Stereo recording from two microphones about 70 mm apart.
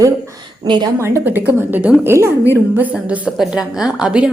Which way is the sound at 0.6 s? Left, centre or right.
Right.